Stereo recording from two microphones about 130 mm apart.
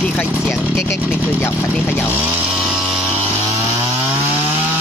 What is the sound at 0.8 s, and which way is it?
Speech, 15° left (ahead or behind).